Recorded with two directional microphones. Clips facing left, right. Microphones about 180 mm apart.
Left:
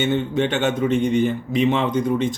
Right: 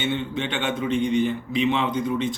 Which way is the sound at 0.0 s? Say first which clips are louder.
Left 6 dB; 45° left (ahead or behind).